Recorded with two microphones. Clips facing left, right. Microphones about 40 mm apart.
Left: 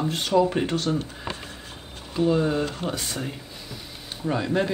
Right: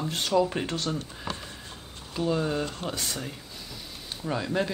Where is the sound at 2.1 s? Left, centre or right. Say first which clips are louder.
Left 5 dB; centre.